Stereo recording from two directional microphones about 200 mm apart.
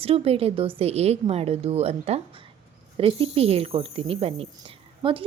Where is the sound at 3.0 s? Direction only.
25° right (ahead or behind).